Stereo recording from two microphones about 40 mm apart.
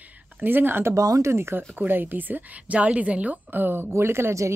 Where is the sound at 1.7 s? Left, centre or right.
Right.